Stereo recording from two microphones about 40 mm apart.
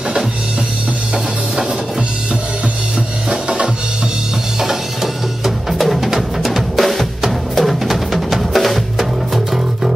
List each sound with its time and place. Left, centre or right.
3.3 s drum: right
4.6 s drum: centre
6.0 s music: centre